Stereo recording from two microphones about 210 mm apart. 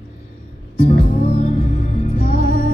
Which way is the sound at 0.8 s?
35° left (ahead or behind).